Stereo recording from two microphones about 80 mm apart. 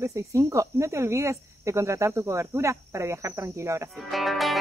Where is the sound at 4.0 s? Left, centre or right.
Centre.